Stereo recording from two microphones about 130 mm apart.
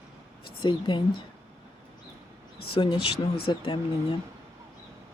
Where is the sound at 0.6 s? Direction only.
40° left (ahead or behind).